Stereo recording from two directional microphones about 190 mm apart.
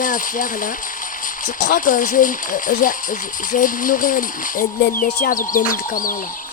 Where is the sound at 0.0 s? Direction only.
45° left (ahead or behind).